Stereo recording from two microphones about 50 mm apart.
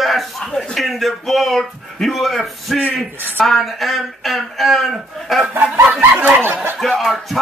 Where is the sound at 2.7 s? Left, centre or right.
Centre.